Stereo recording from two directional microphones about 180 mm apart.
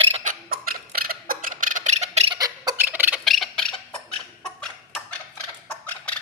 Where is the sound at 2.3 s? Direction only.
20° right (ahead or behind).